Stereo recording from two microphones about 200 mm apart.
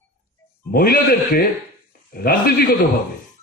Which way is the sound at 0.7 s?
50° left (ahead or behind).